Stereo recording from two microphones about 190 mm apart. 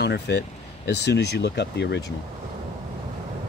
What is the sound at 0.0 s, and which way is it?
Speech, 60° left (ahead or behind).